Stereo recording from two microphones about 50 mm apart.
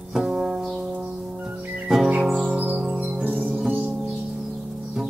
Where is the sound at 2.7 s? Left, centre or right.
Centre.